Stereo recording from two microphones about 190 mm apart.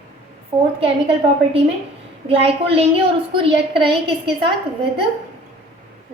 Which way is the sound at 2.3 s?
30° right (ahead or behind).